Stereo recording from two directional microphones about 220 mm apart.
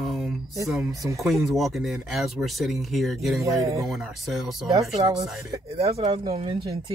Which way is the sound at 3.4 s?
15° right (ahead or behind).